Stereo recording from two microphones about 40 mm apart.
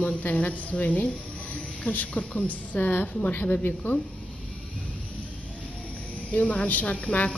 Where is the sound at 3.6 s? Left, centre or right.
Left.